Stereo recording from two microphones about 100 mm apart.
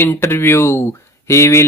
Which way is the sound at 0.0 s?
25° left (ahead or behind).